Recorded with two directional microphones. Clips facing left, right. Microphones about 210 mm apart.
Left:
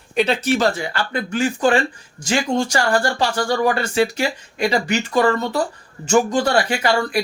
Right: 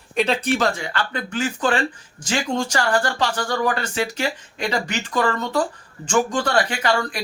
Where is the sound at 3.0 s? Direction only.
10° left (ahead or behind).